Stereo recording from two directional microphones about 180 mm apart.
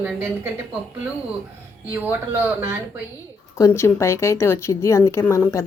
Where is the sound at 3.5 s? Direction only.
15° left (ahead or behind).